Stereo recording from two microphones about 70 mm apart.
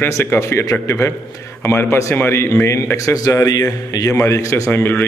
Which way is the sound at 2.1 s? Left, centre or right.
Left.